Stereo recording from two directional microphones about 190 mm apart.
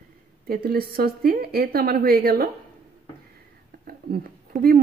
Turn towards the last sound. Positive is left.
turn(degrees=-50)  # may be behind; listen again after turning